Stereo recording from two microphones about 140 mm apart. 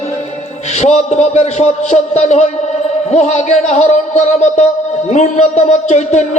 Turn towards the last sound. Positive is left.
turn(degrees=55)  # may be behind; listen again after turning